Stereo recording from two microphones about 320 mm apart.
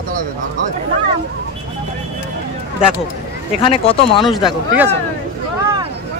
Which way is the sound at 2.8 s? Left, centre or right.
Centre.